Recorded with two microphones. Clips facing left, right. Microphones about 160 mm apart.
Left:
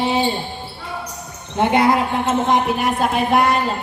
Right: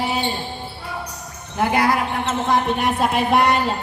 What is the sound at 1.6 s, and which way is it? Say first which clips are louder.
Basketball bounce: left 3 dB; 25° left (ahead or behind).